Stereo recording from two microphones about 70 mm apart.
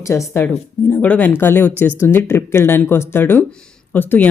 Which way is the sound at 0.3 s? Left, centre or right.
Left.